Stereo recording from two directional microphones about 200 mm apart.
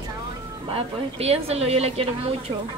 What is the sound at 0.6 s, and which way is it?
A woman's voice, 30° right (ahead or behind).